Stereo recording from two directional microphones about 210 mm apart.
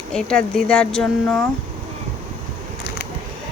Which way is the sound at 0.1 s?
5° left (ahead or behind).